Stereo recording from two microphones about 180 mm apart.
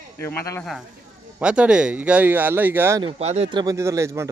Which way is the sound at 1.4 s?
5° right (ahead or behind).